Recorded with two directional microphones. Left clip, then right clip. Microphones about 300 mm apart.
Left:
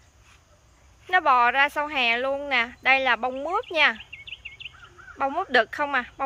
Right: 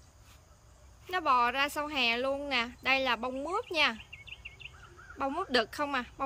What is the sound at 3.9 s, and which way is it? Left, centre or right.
Bird vocalization, right.